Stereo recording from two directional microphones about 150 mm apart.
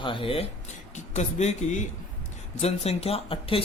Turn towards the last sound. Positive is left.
turn(degrees=40)  # may be behind; listen again after turning